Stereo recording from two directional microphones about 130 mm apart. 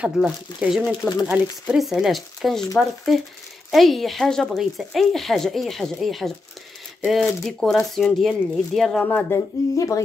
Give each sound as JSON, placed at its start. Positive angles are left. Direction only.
{"t": 0.0, "sound": "speech", "side_deg": -10}
{"t": 0.8, "sound": "speech", "side_deg": 25}
{"t": 1.2, "sound": "speech", "side_deg": -10}
{"t": 3.7, "sound": "speech", "side_deg": 0}
{"t": 9.8, "sound": "speech", "side_deg": 25}